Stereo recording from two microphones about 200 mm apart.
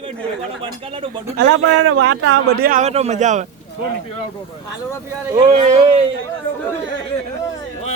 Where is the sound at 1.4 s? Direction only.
70° right (ahead or behind); by 3.4 s 35° right (ahead or behind).